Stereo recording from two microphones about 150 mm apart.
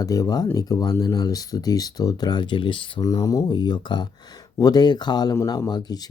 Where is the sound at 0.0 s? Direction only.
25° left (ahead or behind).